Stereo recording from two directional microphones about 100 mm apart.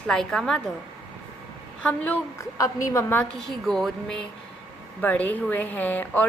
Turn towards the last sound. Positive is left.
turn(degrees=15)  # may be behind; listen again after turning